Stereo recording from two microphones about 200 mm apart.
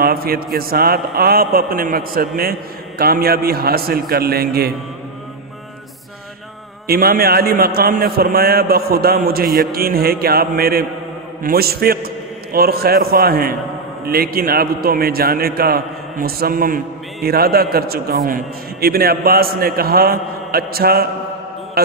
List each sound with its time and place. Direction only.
0.0 s a man's voice: 50° right (ahead or behind)
6.9 s a man's voice: 50° right (ahead or behind)
21.8 s music: 50° right (ahead or behind)